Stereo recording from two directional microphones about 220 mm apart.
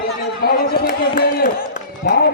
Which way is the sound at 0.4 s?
45° left (ahead or behind).